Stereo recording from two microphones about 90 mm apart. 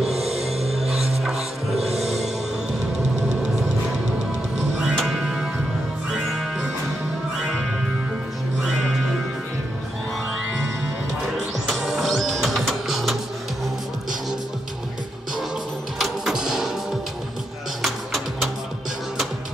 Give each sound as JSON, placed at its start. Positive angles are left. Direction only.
{"t": 0.8, "sound": "music", "side_deg": -5}
{"t": 4.6, "sound": "music", "side_deg": 0}
{"t": 8.6, "sound": "music", "side_deg": 5}
{"t": 11.6, "sound": "music", "side_deg": 0}
{"t": 16.0, "sound": "a sound", "side_deg": -5}
{"t": 17.8, "sound": "music", "side_deg": 0}